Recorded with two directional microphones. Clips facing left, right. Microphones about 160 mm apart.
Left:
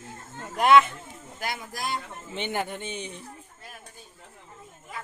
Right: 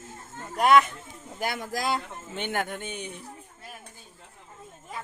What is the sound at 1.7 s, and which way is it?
Speech, 90° right.